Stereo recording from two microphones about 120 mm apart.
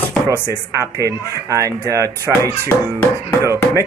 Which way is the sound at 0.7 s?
25° right (ahead or behind).